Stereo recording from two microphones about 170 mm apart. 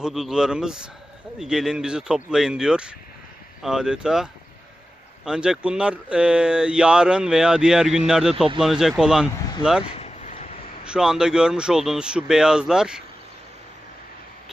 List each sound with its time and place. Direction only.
0.0 s speech: 5° right (ahead or behind)
9.8 s a sound: 35° left (ahead or behind)
10.8 s speech: 5° right (ahead or behind)